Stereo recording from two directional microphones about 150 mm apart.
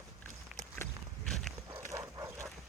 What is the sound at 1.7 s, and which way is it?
Dog, 20° right (ahead or behind).